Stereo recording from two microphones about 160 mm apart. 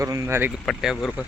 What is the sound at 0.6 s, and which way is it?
Speech, centre (ahead or behind).